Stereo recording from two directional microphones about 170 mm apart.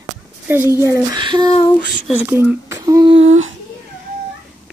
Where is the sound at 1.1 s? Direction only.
25° right (ahead or behind).